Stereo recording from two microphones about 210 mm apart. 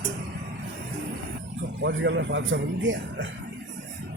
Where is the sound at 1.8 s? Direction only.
60° right (ahead or behind).